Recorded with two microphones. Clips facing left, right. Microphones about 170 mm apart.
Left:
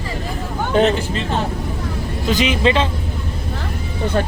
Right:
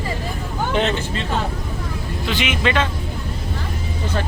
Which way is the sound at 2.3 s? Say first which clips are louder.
Left 5 dB; 35° left (ahead or behind).